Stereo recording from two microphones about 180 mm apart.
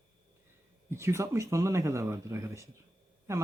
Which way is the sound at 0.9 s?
15° right (ahead or behind).